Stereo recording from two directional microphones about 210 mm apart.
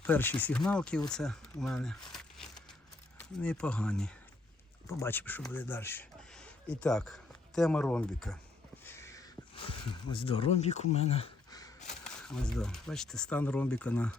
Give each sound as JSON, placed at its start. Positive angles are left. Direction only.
{"t": 0.0, "sound": "speech", "side_deg": 10}
{"t": 2.1, "sound": "a sound", "side_deg": 0}
{"t": 3.2, "sound": "speech", "side_deg": 5}
{"t": 8.8, "sound": "a sound", "side_deg": 10}
{"t": 9.6, "sound": "speech", "side_deg": 25}
{"t": 12.0, "sound": "speech", "side_deg": 5}